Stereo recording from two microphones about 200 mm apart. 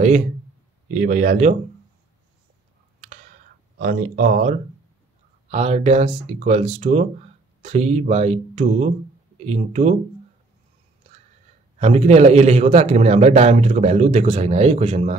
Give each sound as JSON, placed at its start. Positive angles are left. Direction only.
{"t": 0.9, "sound": "a man's voice", "side_deg": -40}
{"t": 3.7, "sound": "a man's voice", "side_deg": -45}
{"t": 11.8, "sound": "a man's voice", "side_deg": -30}